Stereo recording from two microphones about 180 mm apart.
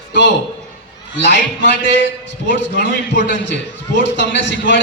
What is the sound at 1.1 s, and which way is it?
A man's voice, 75° left (ahead or behind).